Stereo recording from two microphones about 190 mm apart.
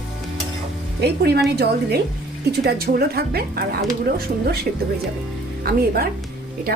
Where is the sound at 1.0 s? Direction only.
60° right (ahead or behind).